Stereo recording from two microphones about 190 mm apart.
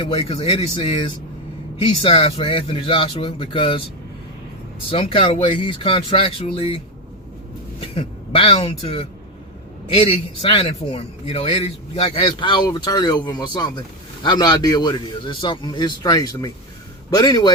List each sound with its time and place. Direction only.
0.0 s speech: 30° left (ahead or behind)
4.9 s a woman's voice: 30° left (ahead or behind)